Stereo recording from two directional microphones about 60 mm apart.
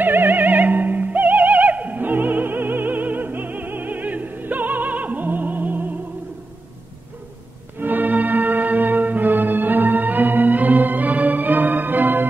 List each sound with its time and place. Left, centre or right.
0.0 s music: right
7.8 s organ: right